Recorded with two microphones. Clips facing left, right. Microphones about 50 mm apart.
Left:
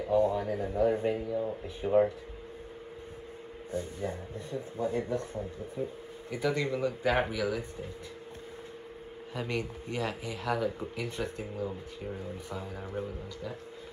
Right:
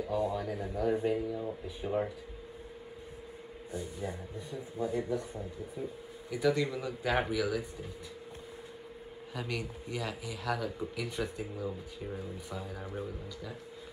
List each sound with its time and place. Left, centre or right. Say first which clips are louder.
0.0 s speech: left 5 dB; left
1.2 s speech: left 4 dB; centre
1.9 s speech: left 9 dB; left
3.7 s speech: left 4 dB; left
9.3 s speech: left 3 dB; left